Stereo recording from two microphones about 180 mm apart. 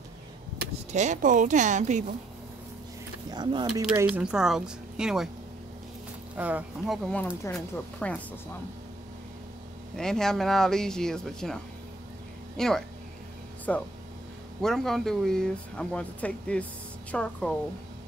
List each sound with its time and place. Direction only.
0.9 s speech: 40° right (ahead or behind)
3.3 s speech: 25° right (ahead or behind)
4.0 s speech: 5° right (ahead or behind)
6.3 s speech: 10° right (ahead or behind)
7.4 s speech: 10° left (ahead or behind)
9.9 s a woman's voice: 5° left (ahead or behind)